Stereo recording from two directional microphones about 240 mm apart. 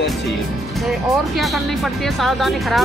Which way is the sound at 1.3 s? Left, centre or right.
Centre.